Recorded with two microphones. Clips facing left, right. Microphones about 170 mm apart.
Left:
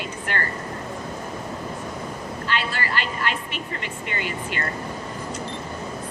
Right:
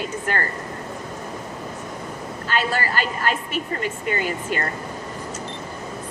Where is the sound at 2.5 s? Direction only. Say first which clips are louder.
Right 4 dB; 45° right (ahead or behind).